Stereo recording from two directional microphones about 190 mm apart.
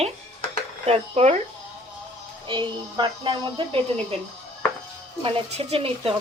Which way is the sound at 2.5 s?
25° right (ahead or behind).